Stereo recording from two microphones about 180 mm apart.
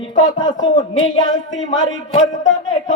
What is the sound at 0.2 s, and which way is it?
Speech, 20° left (ahead or behind).